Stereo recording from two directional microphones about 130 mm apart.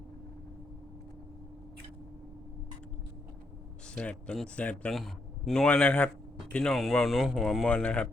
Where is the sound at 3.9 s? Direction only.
10° left (ahead or behind).